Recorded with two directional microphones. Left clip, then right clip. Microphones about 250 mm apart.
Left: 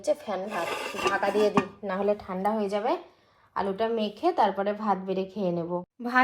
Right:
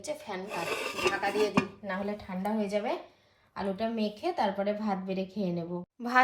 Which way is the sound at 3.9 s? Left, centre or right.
Left.